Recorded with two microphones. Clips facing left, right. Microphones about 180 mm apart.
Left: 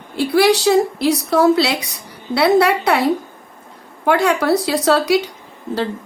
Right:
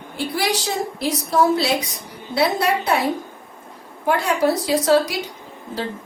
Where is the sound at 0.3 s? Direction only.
65° left (ahead or behind).